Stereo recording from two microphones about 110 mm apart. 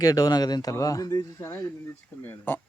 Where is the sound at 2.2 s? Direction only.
20° left (ahead or behind).